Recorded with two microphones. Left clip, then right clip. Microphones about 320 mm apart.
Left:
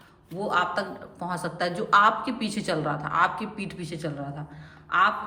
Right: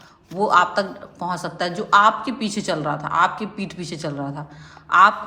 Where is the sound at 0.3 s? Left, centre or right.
Centre.